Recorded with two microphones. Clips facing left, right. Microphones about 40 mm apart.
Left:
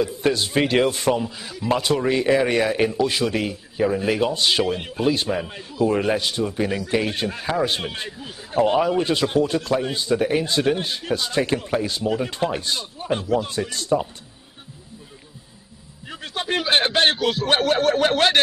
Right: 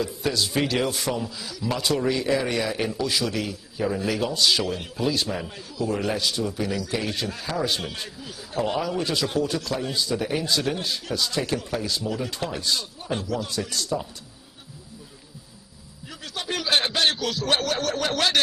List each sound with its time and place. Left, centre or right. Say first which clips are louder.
0.0 s a man's voice: left 5 dB; left
16.1 s a man's voice: left 5 dB; left